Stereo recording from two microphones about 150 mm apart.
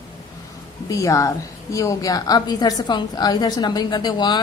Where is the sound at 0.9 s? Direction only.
20° left (ahead or behind).